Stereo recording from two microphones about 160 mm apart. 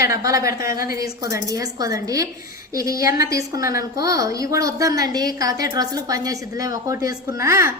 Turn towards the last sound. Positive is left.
turn(degrees=-20)  # may be behind; listen again after turning